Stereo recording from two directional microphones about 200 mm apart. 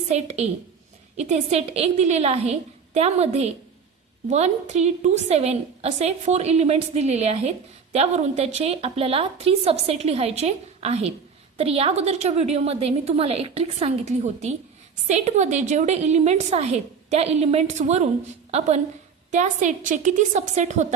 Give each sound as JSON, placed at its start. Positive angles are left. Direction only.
{"t": 0.1, "sound": "a woman's voice", "side_deg": -30}
{"t": 19.3, "sound": "a woman's voice", "side_deg": -35}